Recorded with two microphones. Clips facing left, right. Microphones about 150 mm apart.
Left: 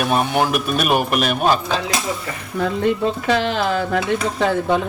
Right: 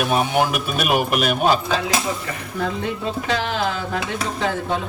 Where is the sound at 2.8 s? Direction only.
60° left (ahead or behind).